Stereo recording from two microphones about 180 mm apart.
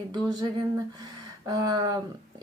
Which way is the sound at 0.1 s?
20° right (ahead or behind).